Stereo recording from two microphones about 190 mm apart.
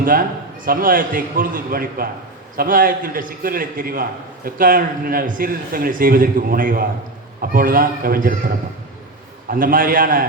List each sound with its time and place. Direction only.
0.0 s speech: 45° right (ahead or behind)
9.5 s speech: 45° right (ahead or behind)